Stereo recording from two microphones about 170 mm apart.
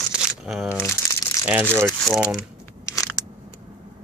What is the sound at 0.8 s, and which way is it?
Crumpling, 20° left (ahead or behind).